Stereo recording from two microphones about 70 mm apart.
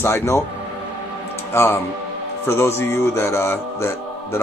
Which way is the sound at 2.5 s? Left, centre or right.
Left.